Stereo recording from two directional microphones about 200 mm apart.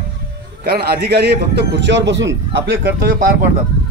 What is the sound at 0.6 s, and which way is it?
A man's voice, 50° right (ahead or behind).